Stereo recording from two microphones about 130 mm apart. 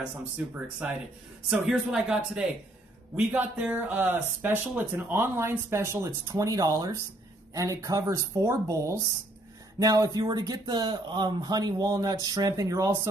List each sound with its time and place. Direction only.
1.5 s speech: 5° right (ahead or behind); by 13.1 s 25° right (ahead or behind)